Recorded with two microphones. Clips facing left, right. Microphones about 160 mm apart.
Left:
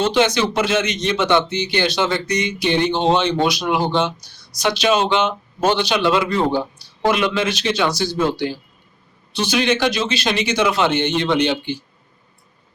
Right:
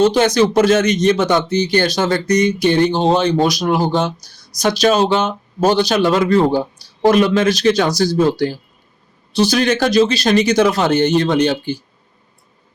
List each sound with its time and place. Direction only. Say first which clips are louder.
0.0 s speech: right 5 dB; 40° right (ahead or behind)